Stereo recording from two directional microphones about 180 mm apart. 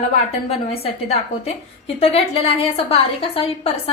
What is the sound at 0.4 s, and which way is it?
A woman's voice, 35° left (ahead or behind).